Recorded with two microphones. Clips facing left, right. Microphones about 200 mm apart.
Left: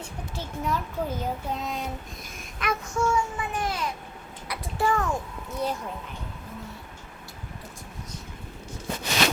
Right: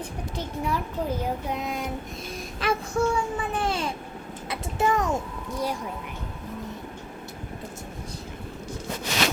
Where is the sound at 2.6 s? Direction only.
35° right (ahead or behind).